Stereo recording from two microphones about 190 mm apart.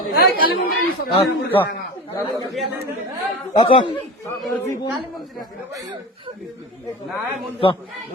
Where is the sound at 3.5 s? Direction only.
25° left (ahead or behind).